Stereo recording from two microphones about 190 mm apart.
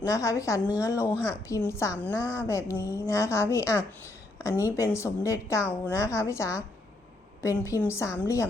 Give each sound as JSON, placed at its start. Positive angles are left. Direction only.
{"t": 0.0, "sound": "a woman's voice", "side_deg": 15}